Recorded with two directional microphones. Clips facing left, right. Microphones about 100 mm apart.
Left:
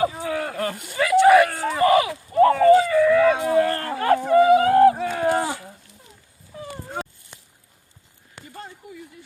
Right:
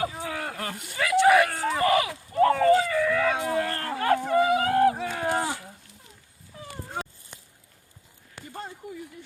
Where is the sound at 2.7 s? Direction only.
30° left (ahead or behind).